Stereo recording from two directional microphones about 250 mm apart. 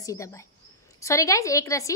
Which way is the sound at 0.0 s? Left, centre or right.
Centre.